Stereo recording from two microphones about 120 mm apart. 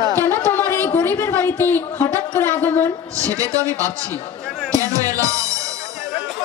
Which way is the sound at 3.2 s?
30° right (ahead or behind).